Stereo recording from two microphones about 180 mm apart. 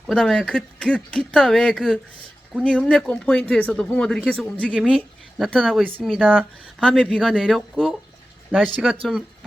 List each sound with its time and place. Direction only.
0.1 s speech: 5° left (ahead or behind)